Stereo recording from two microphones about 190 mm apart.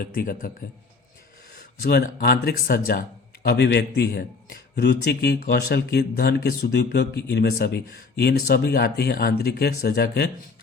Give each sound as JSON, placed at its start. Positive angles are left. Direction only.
{"t": 0.0, "sound": "speech", "side_deg": 50}
{"t": 1.8, "sound": "a man's voice", "side_deg": 55}